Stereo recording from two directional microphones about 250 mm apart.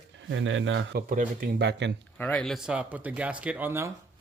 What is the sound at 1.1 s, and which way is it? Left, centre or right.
Speech, right.